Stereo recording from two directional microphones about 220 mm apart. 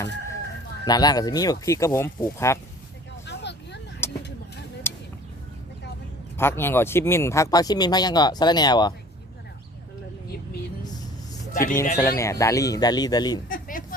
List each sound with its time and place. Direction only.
0.9 s speech: 20° left (ahead or behind)
3.2 s vehicle: 50° left (ahead or behind)
4.0 s a sound: 10° left (ahead or behind)
6.3 s speech: 10° left (ahead or behind)
11.5 s speech: 40° left (ahead or behind)
11.9 s speech: 15° left (ahead or behind)
13.5 s a sound: 40° left (ahead or behind)